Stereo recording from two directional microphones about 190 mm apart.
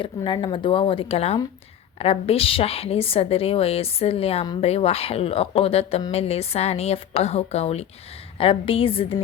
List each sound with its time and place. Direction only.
0.0 s a woman's voice: 25° left (ahead or behind)